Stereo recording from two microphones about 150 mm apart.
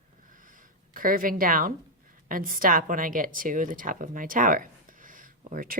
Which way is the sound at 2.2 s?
70° right (ahead or behind).